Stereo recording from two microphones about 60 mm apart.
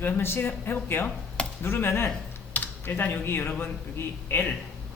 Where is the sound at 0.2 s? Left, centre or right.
Left.